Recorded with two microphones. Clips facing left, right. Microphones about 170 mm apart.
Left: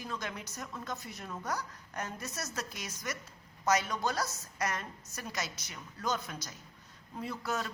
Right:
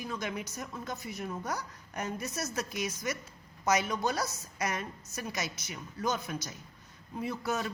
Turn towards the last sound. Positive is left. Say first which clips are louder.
# right 3 dB
turn(degrees=-20)  # may be behind; listen again after turning